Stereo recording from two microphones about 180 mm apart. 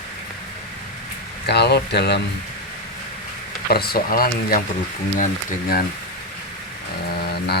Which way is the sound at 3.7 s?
55° left (ahead or behind).